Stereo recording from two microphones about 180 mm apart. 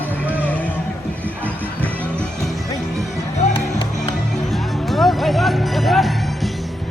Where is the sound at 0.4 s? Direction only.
10° left (ahead or behind).